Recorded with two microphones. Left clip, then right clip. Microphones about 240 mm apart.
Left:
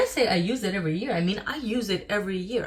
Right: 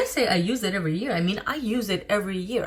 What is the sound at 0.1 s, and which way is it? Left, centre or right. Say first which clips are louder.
Speech: right 1 dB; centre.